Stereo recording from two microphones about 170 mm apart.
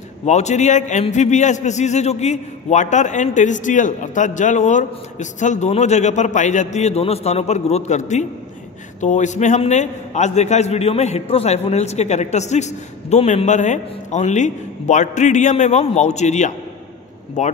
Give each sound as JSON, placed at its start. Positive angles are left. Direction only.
{"t": 0.2, "sound": "a man's voice", "side_deg": 40}